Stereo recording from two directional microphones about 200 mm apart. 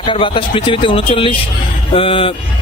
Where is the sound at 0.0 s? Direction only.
25° left (ahead or behind).